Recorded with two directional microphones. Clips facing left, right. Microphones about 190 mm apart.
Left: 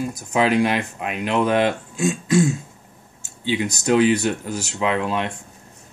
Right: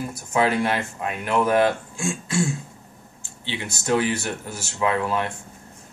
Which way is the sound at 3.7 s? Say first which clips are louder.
Left 5 dB; 20° left (ahead or behind).